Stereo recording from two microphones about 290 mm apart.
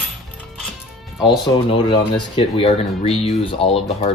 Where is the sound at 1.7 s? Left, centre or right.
Centre.